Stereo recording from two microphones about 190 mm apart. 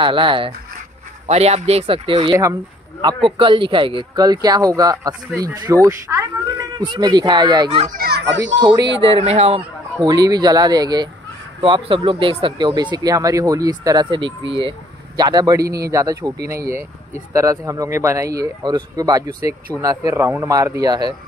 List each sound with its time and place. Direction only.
0.0 s speech: 25° right (ahead or behind)
8.0 s children playing: 60° right (ahead or behind)
8.5 s speech: 25° right (ahead or behind)
10.0 s speech: 20° right (ahead or behind)
19.7 s speech: 5° left (ahead or behind)
20.1 s speech: 10° right (ahead or behind)